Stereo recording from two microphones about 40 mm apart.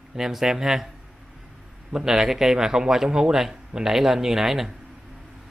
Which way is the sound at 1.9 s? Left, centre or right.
Centre.